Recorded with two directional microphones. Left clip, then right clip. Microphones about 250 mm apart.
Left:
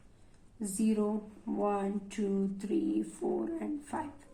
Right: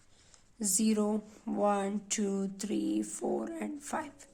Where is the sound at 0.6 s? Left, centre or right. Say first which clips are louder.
Right 1 dB; right.